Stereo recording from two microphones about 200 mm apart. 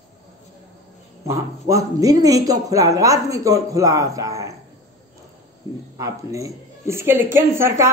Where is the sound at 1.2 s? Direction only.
15° right (ahead or behind).